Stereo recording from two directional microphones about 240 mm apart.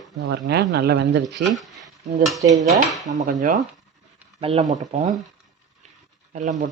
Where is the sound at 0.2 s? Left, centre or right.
Right.